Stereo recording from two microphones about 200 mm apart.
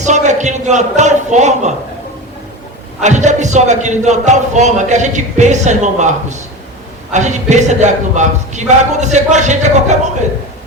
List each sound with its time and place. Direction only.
0.0 s a man's voice: 35° right (ahead or behind)
3.0 s a man's voice: 35° right (ahead or behind)